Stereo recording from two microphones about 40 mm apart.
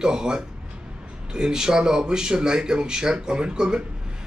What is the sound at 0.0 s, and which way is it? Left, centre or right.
Speech, centre.